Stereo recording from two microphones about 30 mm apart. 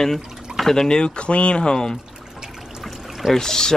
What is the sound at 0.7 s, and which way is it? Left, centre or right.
Speech, left.